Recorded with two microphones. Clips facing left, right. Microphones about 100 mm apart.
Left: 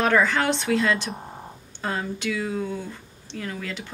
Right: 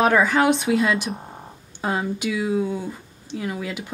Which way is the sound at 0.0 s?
10° right (ahead or behind).